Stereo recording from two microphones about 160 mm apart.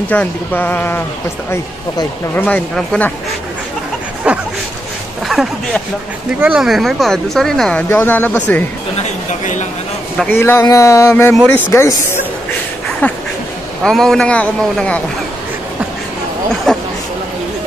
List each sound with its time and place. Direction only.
0.1 s speech: 10° left (ahead or behind)
4.2 s dog: 5° right (ahead or behind)
5.3 s speech: centre (ahead or behind)
7.9 s speech: 15° left (ahead or behind)
9.3 s a woman's voice: 50° left (ahead or behind)
10.1 s speech: 10° left (ahead or behind)
16.7 s speech: centre (ahead or behind)